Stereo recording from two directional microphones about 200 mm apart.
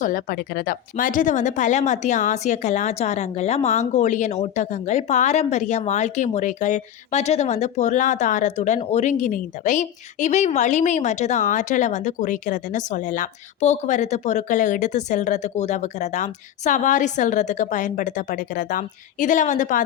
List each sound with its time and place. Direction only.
0.0 s a woman's voice: 45° left (ahead or behind)